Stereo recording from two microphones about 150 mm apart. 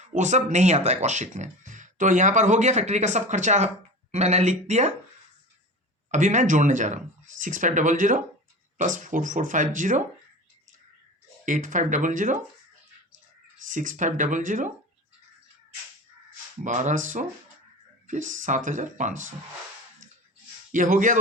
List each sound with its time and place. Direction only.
0.0 s speech: 50° right (ahead or behind)
6.1 s speech: 55° right (ahead or behind)
11.4 s speech: 60° right (ahead or behind)
13.7 s speech: 60° right (ahead or behind)
16.6 s speech: 55° right (ahead or behind)
20.7 s speech: 60° right (ahead or behind)